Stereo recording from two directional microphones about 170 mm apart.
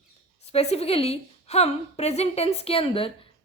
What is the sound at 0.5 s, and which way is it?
A woman's voice, 40° left (ahead or behind).